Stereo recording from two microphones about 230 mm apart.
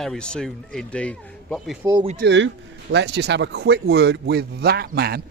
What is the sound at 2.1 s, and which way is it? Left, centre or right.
Speech, right.